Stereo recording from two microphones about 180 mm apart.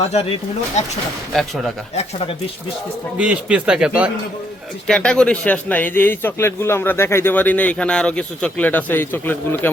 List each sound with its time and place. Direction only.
0.8 s speech: 40° left (ahead or behind)
1.3 s a man's voice: centre (ahead or behind)
2.0 s speech: 30° left (ahead or behind)
3.2 s a man's voice: 5° right (ahead or behind)
4.9 s a man's voice: 5° left (ahead or behind)